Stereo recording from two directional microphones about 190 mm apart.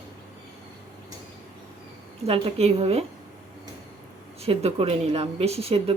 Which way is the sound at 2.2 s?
30° right (ahead or behind).